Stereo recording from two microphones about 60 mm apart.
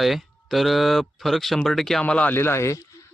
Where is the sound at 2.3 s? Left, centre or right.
Left.